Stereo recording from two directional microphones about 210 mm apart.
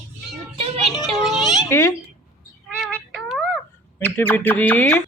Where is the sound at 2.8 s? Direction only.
Centre (ahead or behind).